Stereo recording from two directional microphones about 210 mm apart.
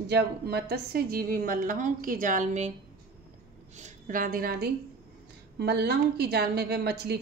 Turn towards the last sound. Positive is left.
turn(degrees=-50)  # may be behind; listen again after turning